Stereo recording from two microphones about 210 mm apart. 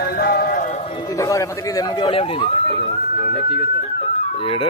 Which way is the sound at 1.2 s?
15° left (ahead or behind).